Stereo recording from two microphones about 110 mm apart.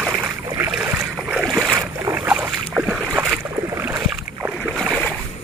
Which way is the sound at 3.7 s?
25° right (ahead or behind).